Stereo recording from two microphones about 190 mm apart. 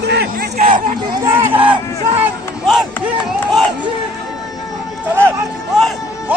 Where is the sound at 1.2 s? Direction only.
10° right (ahead or behind).